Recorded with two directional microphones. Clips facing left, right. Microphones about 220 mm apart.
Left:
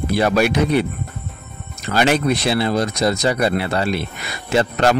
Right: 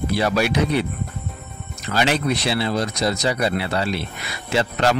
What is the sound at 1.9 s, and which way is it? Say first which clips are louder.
Speech: left 4 dB; 50° left (ahead or behind).